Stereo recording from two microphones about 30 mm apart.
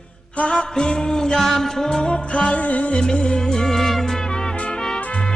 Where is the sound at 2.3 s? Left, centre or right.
Left.